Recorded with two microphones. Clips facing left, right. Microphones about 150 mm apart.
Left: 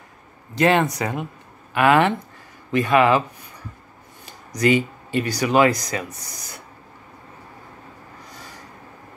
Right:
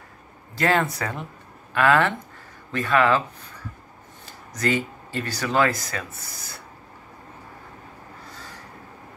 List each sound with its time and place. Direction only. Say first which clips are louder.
0.6 s speech: left 4 dB; 20° left (ahead or behind)
4.3 s speech: left 6 dB; 15° left (ahead or behind)
8.3 s train: left 1 dB; 15° left (ahead or behind)